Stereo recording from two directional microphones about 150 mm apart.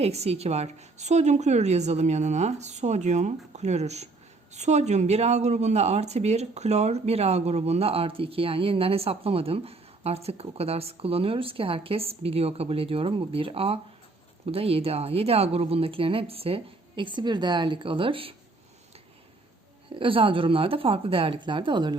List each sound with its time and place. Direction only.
0.0 s a woman's voice: 45° right (ahead or behind)
19.9 s speech: 35° right (ahead or behind)